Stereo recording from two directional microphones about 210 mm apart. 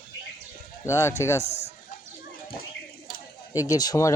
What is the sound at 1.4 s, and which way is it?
Speech, 30° left (ahead or behind).